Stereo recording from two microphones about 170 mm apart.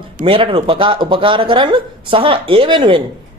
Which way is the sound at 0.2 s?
30° right (ahead or behind).